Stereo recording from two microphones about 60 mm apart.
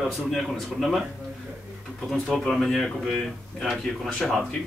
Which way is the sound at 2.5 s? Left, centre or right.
Centre.